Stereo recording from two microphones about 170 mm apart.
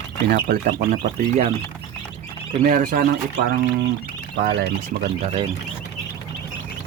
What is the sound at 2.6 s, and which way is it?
Speech, 50° right (ahead or behind).